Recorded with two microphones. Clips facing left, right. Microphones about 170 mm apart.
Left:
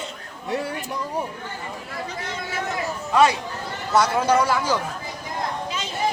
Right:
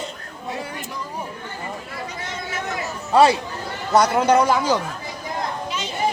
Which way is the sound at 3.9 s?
20° right (ahead or behind).